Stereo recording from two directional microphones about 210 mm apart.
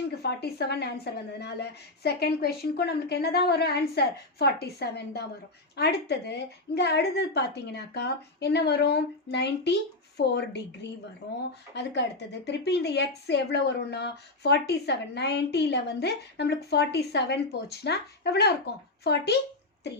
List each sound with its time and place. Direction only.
0.2 s speech: 50° left (ahead or behind)